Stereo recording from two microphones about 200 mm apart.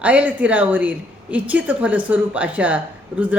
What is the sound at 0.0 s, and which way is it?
Speech, 5° right (ahead or behind).